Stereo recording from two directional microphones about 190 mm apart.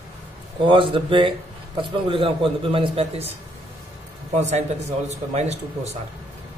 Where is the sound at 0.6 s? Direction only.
25° right (ahead or behind).